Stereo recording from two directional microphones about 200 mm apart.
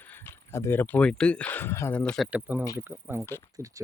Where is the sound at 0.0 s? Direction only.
10° left (ahead or behind).